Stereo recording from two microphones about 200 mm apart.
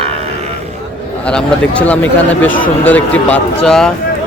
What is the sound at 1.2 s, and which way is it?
Speech, 5° left (ahead or behind).